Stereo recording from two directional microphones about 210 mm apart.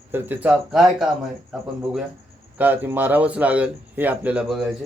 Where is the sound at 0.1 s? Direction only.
10° right (ahead or behind).